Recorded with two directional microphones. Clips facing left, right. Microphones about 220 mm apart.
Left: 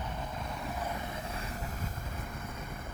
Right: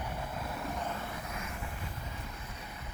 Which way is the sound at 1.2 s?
35° left (ahead or behind).